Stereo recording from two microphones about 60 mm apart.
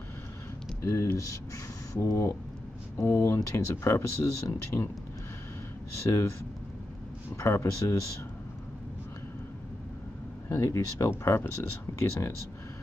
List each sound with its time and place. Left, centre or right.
0.8 s speech: left
2.0 s speech: left
6.0 s speech: left
7.3 s speech: left
10.5 s speech: left